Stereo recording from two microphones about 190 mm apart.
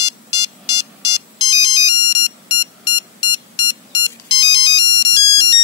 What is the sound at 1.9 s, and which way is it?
Ringtone, 20° left (ahead or behind).